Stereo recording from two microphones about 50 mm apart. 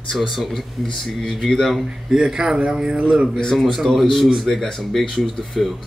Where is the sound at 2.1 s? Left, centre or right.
Centre.